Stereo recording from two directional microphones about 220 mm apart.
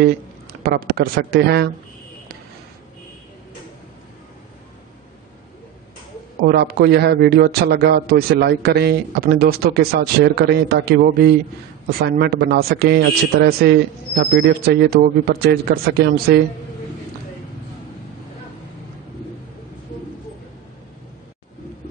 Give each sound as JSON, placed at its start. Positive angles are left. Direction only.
{"t": 0.0, "sound": "speech", "side_deg": -45}
{"t": 6.4, "sound": "a man's voice", "side_deg": -45}